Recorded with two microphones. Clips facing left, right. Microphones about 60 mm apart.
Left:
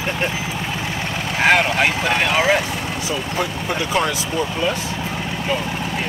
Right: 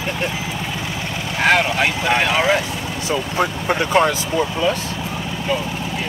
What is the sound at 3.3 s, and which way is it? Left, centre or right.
Speech, right.